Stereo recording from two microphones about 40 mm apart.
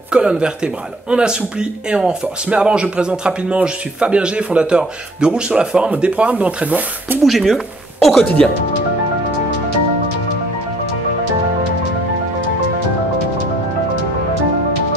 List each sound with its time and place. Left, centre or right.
0.1 s speech: right
7.2 s speech: centre
8.4 s speech: centre